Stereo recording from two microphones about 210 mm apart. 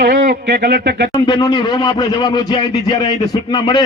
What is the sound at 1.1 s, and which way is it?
Speech, 20° left (ahead or behind).